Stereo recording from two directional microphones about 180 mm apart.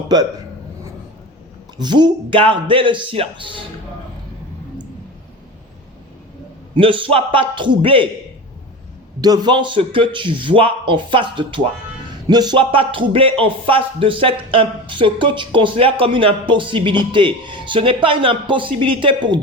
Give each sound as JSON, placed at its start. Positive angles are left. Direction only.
{"t": 1.8, "sound": "speech", "side_deg": -25}
{"t": 6.7, "sound": "speech", "side_deg": -30}
{"t": 9.2, "sound": "speech", "side_deg": -25}